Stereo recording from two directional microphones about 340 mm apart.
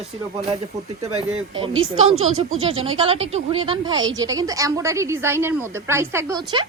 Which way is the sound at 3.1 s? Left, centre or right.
Centre.